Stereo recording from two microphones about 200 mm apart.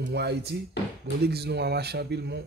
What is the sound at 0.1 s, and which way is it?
Speech, 55° right (ahead or behind).